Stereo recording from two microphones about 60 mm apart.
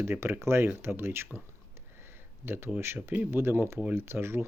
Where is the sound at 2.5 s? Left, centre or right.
Right.